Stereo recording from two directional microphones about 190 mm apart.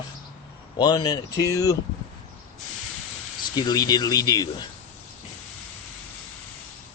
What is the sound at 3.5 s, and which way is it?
Speech, 20° left (ahead or behind).